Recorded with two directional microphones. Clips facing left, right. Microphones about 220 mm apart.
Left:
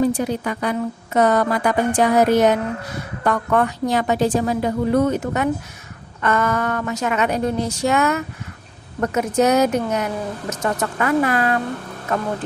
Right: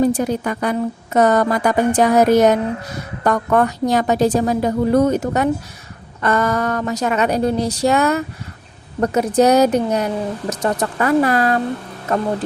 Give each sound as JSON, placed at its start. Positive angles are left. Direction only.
{"t": 0.0, "sound": "a woman's voice", "side_deg": -45}